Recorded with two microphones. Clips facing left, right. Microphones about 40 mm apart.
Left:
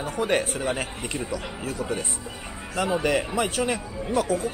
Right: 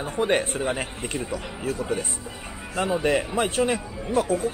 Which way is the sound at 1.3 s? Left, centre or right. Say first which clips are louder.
Right 2 dB; right.